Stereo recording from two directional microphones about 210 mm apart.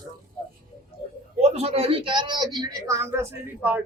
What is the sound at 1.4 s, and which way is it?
A woman's voice, 30° right (ahead or behind).